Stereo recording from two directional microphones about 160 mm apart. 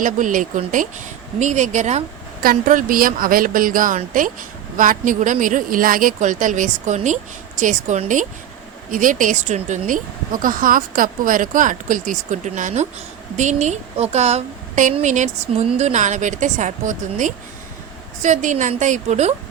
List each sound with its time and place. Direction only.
0.0 s a woman's voice: 55° right (ahead or behind)
2.4 s a woman's voice: 60° right (ahead or behind); by 19.3 s 45° right (ahead or behind)